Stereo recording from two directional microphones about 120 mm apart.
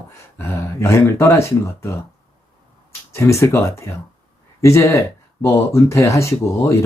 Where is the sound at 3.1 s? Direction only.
25° left (ahead or behind).